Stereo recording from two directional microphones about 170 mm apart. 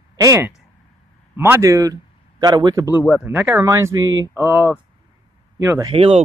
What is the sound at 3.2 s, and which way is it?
Speech, 10° right (ahead or behind).